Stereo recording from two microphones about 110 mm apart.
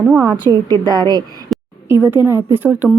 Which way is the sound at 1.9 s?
20° right (ahead or behind).